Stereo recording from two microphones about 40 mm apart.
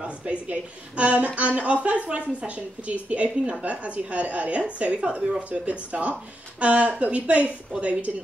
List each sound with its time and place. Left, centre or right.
0.2 s a woman's voice: right